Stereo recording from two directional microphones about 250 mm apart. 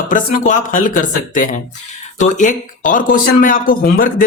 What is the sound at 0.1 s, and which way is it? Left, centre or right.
Speech, left.